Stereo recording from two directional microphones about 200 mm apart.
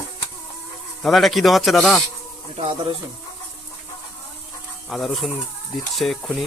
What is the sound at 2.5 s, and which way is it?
Speech, 30° right (ahead or behind).